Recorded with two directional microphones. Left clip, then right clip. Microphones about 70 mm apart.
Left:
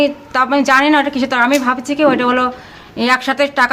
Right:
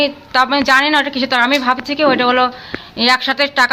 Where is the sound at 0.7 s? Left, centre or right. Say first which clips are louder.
Left 1 dB; centre.